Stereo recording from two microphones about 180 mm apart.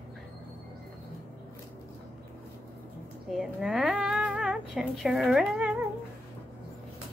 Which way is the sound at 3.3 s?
Centre (ahead or behind).